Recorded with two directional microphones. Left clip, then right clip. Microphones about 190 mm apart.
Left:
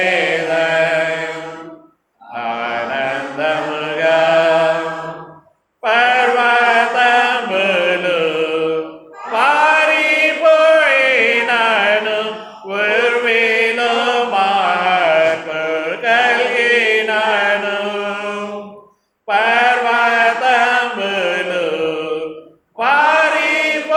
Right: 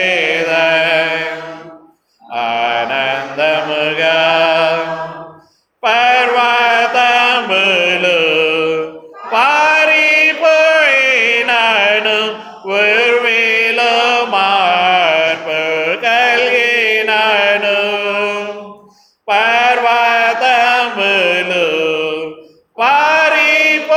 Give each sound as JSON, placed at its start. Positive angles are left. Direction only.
{"t": 0.0, "sound": "mantra", "side_deg": -35}
{"t": 2.3, "sound": "mantra", "side_deg": -35}
{"t": 5.8, "sound": "mantra", "side_deg": -30}
{"t": 9.3, "sound": "chant", "side_deg": -35}
{"t": 12.6, "sound": "mantra", "side_deg": -35}
{"t": 22.8, "sound": "chant", "side_deg": -30}